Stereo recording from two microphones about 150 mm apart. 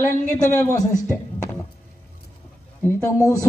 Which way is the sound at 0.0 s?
20° left (ahead or behind).